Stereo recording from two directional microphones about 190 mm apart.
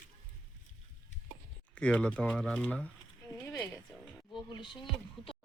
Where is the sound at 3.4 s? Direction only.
15° left (ahead or behind).